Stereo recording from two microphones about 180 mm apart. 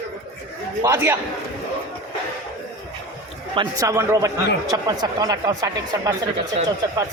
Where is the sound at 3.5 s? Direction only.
20° right (ahead or behind).